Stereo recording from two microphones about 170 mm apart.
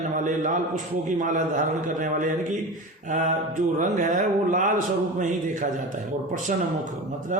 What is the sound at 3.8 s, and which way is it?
A man's voice, 50° right (ahead or behind).